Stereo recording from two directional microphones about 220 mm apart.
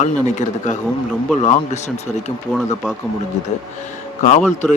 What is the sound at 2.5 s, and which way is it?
Speech, centre (ahead or behind).